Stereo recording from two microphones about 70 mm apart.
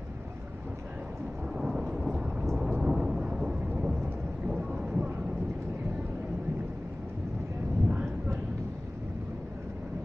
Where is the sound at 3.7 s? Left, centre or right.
Centre.